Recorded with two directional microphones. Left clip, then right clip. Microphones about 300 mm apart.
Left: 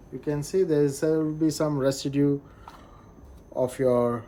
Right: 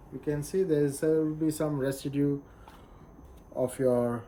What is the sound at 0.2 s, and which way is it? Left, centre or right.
Speech, centre.